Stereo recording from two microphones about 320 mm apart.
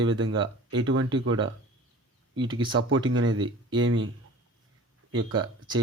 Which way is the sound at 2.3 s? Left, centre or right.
Centre.